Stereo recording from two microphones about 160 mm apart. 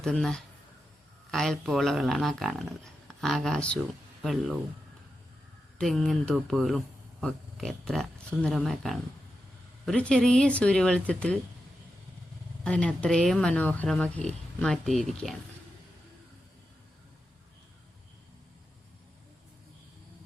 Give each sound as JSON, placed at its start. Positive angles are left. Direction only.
{"t": 0.0, "sound": "speech", "side_deg": 5}
{"t": 5.8, "sound": "speech", "side_deg": 0}
{"t": 12.6, "sound": "speech", "side_deg": 5}